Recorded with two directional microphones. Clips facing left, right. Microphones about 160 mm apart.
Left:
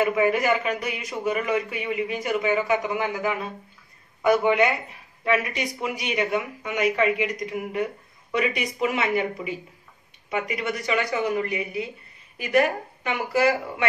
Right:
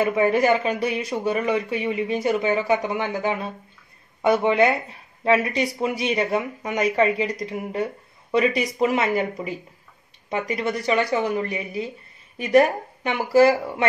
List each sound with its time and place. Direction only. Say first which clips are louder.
0.0 s speech: right 2 dB; 30° right (ahead or behind)